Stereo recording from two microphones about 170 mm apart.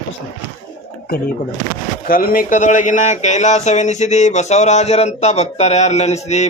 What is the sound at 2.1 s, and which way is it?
Speech, 60° left (ahead or behind).